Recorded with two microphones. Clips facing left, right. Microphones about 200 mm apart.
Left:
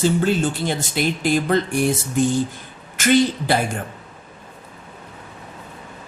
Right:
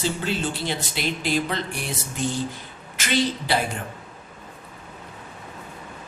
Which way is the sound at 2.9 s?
50° left (ahead or behind).